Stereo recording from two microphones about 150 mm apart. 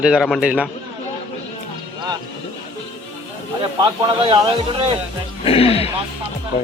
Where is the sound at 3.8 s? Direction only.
35° right (ahead or behind).